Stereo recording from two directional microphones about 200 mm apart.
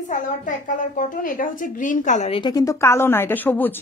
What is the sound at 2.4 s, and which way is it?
Speech, 20° left (ahead or behind).